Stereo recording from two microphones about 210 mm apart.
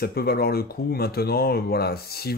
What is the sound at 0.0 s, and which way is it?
Speech, 45° left (ahead or behind).